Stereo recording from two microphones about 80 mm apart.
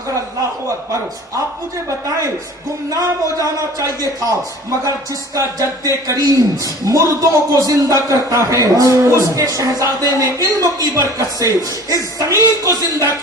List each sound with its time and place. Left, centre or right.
2.9 s a man's voice: right